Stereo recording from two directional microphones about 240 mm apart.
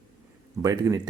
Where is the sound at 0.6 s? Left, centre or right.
Centre.